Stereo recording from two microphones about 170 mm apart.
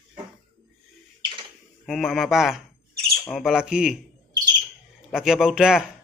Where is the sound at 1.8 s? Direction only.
Centre (ahead or behind).